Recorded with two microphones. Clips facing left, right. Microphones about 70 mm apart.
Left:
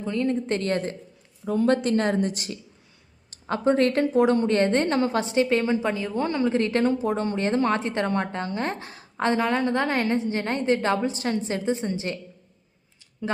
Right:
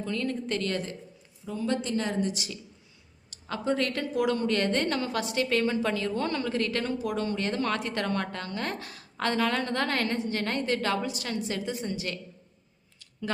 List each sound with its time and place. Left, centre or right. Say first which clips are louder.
0.0 s a woman's voice: left 6 dB; left
0.4 s a woman's voice: left 5 dB; left
1.5 s a woman's voice: left 8 dB; left